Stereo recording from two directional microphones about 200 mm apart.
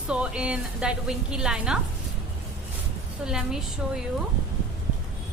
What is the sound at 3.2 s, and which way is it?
Speech, 5° right (ahead or behind).